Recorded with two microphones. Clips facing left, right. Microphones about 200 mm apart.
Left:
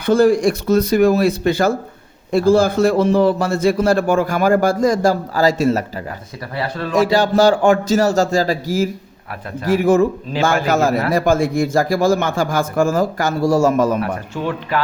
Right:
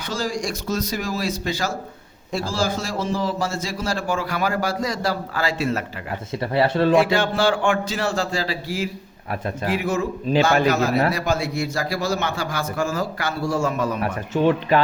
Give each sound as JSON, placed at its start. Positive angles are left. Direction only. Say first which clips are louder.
{"t": 0.0, "sound": "a man's voice", "louder": "left 13 dB", "side_deg": 55}
{"t": 6.4, "sound": "speech", "louder": "right 6 dB", "side_deg": -25}
{"t": 6.9, "sound": "a man's voice", "louder": "left 4 dB", "side_deg": 40}